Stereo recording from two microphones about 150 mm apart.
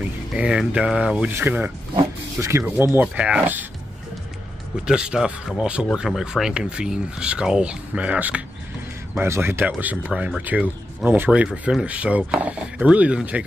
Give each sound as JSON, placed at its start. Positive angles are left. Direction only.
{"t": 0.3, "sound": "speech", "side_deg": -5}
{"t": 4.8, "sound": "speech", "side_deg": -5}